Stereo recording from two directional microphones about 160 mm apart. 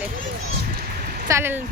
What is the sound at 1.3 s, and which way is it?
Speech, 15° right (ahead or behind).